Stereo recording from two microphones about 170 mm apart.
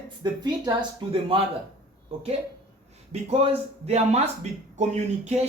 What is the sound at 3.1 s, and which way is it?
Speech, 40° right (ahead or behind).